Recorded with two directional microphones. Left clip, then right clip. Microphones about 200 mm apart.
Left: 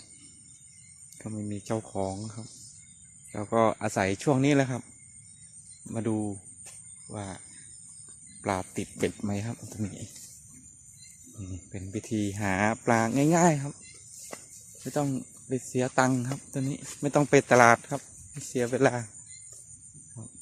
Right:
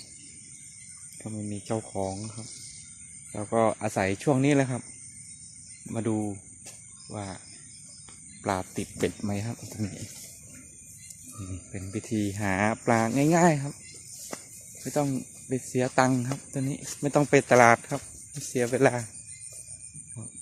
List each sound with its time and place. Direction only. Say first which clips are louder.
1.2 s speech: even; 25° left (ahead or behind)
5.9 s speech: right 1 dB; 15° left (ahead or behind)
8.4 s speech: right 1 dB; 20° left (ahead or behind)
11.7 s speech: right 1 dB; 15° left (ahead or behind)
14.3 s snake: right 3 dB; centre (ahead or behind)
14.8 s speech: right 2 dB; 10° left (ahead or behind)